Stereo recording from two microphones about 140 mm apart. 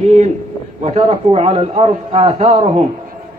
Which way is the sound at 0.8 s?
50° right (ahead or behind).